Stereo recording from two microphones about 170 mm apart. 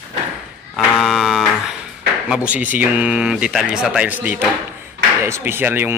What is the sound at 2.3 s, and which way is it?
A man's voice, 5° right (ahead or behind).